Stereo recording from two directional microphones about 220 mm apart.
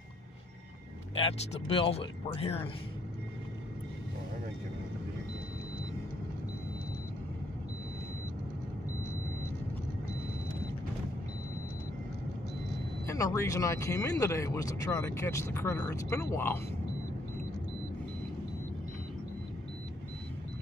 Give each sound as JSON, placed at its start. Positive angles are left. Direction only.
{"t": 1.1, "sound": "speech", "side_deg": 25}
{"t": 13.0, "sound": "speech", "side_deg": 15}